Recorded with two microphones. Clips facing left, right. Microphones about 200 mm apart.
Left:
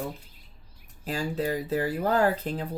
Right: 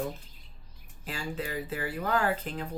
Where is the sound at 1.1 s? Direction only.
40° left (ahead or behind).